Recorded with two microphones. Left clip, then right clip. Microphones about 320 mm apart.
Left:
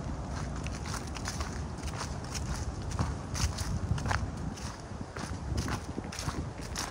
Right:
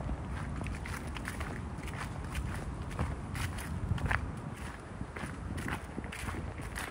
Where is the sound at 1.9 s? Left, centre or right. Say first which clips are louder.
Left 3 dB; centre.